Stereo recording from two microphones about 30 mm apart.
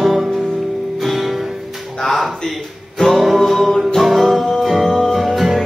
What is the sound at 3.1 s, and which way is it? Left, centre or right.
Music, centre.